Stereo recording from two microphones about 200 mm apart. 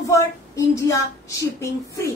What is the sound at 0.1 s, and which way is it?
Speech, 15° left (ahead or behind).